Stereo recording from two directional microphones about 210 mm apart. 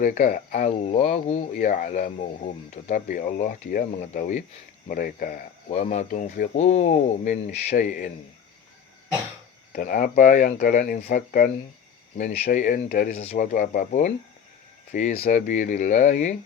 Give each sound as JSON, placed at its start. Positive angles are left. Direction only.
{"t": 0.0, "sound": "speech", "side_deg": 40}
{"t": 9.7, "sound": "speech", "side_deg": 40}